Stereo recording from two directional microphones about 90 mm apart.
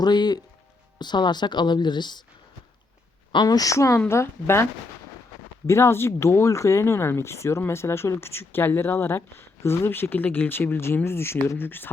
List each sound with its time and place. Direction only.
0.0 s speech: 50° left (ahead or behind)
3.3 s speech: 45° left (ahead or behind); by 4.6 s 30° left (ahead or behind)
5.6 s speech: 30° left (ahead or behind)